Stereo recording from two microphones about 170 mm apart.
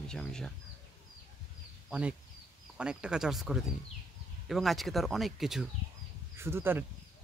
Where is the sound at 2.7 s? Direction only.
5° right (ahead or behind).